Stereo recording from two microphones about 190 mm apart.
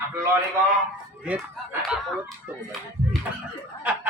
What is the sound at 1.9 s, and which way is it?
Speech, centre (ahead or behind).